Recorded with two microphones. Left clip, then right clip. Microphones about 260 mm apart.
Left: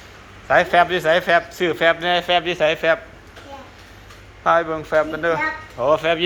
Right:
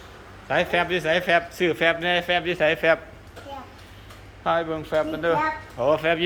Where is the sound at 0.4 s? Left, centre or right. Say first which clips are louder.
Left 7 dB; centre.